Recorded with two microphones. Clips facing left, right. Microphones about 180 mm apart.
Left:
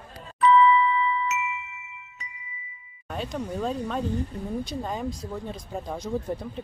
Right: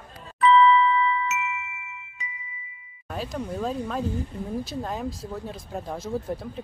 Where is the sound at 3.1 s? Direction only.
Centre (ahead or behind).